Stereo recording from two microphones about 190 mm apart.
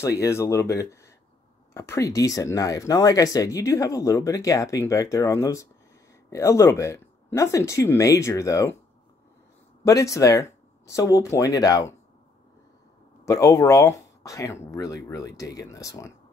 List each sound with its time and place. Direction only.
0.2 s speech: 15° left (ahead or behind)
9.8 s speech: 15° left (ahead or behind)
13.2 s speech: 15° left (ahead or behind)